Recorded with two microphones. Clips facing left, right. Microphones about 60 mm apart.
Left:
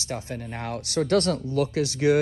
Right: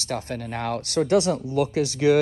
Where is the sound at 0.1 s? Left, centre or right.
Right.